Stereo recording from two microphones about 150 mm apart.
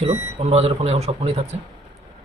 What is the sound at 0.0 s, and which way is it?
Speech, 45° right (ahead or behind).